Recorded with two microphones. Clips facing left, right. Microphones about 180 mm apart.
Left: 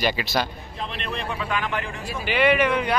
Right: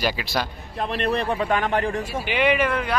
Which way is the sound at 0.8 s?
55° right (ahead or behind).